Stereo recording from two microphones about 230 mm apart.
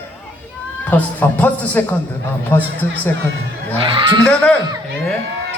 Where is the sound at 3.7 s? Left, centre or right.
Right.